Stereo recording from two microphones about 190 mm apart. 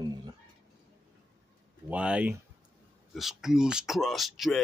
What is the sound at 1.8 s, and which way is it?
Speech, 5° right (ahead or behind).